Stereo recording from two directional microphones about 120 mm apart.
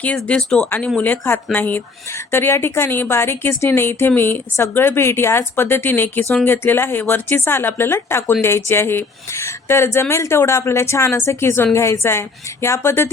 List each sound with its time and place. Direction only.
0.0 s speech: 10° left (ahead or behind)